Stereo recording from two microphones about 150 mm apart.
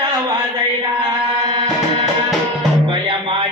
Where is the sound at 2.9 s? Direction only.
35° right (ahead or behind).